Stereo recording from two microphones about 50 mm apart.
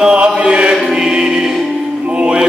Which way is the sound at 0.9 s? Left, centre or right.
Centre.